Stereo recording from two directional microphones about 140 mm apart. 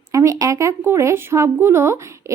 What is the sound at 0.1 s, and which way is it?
Speech, 25° right (ahead or behind).